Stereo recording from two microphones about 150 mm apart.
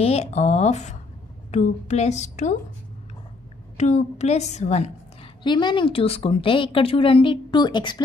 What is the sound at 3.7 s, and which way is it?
A woman's voice, 50° left (ahead or behind).